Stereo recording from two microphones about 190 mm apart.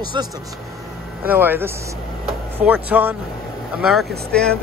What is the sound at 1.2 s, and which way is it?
Speech, 10° right (ahead or behind).